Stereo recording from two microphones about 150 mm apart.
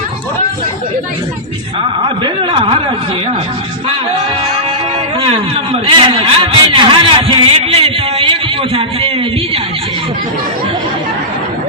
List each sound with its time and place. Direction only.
2.0 s a man's voice: 35° right (ahead or behind)
5.2 s a man's voice: 40° right (ahead or behind)